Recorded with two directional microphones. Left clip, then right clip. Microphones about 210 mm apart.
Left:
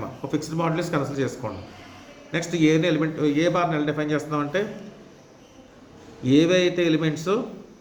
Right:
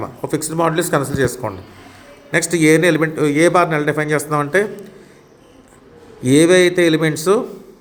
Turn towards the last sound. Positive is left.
turn(degrees=-50)  # may be behind; listen again after turning